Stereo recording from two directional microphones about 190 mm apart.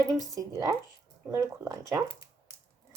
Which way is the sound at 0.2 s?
15° right (ahead or behind).